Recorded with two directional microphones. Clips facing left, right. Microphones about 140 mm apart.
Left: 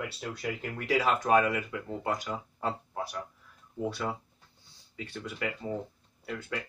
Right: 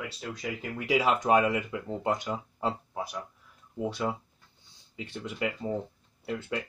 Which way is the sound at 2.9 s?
15° right (ahead or behind).